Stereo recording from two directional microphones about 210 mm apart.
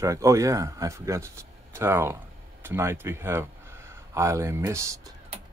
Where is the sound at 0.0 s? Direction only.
15° right (ahead or behind).